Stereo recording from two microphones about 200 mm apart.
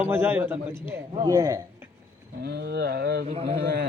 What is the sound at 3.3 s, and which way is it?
Speech, 30° right (ahead or behind).